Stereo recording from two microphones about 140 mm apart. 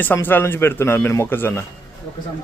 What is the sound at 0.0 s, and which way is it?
Speech, 15° left (ahead or behind).